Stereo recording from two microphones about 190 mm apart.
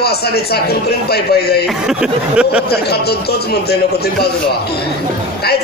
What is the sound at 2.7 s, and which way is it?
Speech, 55° left (ahead or behind).